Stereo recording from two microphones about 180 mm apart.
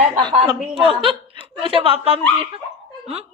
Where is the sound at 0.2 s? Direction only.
25° right (ahead or behind).